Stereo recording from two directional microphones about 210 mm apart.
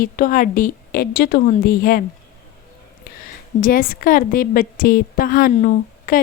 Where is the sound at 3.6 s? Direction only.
40° left (ahead or behind).